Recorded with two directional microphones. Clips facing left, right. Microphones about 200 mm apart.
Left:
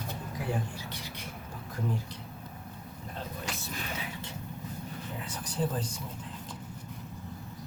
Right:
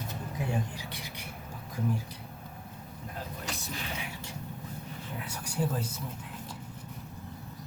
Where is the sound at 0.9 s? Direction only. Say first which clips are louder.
Even; 15° right (ahead or behind).